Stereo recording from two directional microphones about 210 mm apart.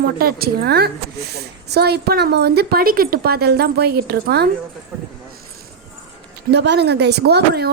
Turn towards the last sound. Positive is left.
turn(degrees=-50)  # may be behind; listen again after turning